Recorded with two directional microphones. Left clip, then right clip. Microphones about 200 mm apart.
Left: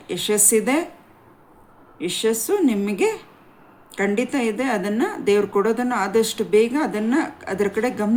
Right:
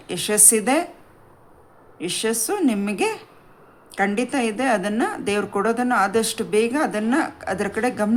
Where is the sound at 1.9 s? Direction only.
25° right (ahead or behind).